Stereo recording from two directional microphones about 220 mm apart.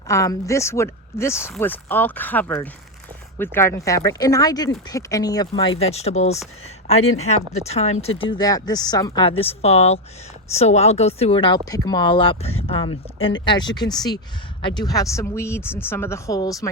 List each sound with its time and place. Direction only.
0.1 s speech: 15° left (ahead or behind); by 8.1 s 30° left (ahead or behind)
8.3 s speech: 15° left (ahead or behind)